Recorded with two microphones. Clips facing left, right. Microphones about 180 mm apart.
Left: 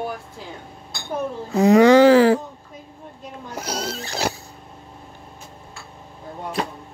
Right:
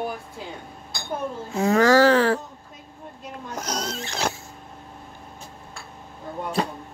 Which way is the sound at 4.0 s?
35° left (ahead or behind).